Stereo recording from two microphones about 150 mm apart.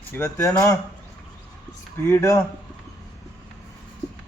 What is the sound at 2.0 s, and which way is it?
Speech, 20° left (ahead or behind).